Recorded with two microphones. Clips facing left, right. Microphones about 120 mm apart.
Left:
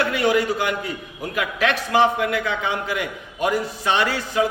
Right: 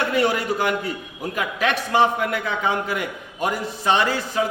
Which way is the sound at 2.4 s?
35° right (ahead or behind).